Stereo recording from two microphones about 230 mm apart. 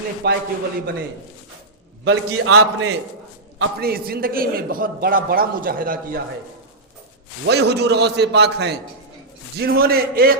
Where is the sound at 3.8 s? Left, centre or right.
Right.